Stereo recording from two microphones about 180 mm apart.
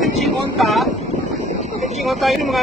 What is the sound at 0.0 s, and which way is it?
Vehicle, centre (ahead or behind).